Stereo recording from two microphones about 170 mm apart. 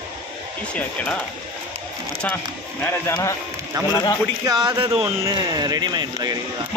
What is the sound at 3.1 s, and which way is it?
Speech, 20° left (ahead or behind).